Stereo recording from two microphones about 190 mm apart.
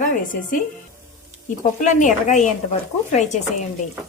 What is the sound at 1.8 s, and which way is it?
Speech, 40° left (ahead or behind).